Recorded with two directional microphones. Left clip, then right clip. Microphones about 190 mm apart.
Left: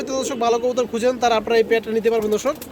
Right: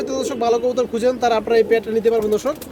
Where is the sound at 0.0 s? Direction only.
5° right (ahead or behind).